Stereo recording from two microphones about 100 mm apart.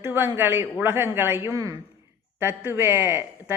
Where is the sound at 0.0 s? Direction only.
25° right (ahead or behind).